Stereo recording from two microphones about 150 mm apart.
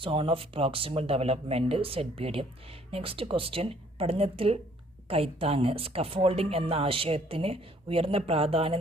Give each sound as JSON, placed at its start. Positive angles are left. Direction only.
{"t": 0.0, "sound": "speech", "side_deg": -35}